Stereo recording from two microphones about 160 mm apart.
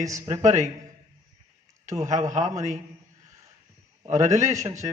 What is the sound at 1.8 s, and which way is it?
Speech, 45° right (ahead or behind).